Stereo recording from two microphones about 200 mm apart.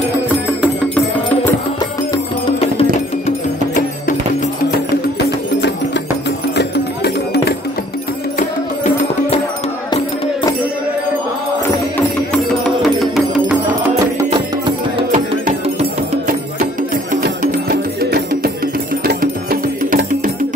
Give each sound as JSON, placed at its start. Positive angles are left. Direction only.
{"t": 2.4, "sound": "music", "side_deg": 30}
{"t": 6.5, "sound": "music", "side_deg": 55}
{"t": 8.4, "sound": "music", "side_deg": 35}
{"t": 12.3, "sound": "music", "side_deg": 0}
{"t": 15.0, "sound": "music", "side_deg": -40}
{"t": 17.1, "sound": "music", "side_deg": -45}